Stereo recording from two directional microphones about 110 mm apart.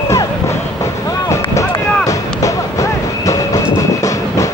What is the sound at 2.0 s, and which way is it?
Music, 30° left (ahead or behind).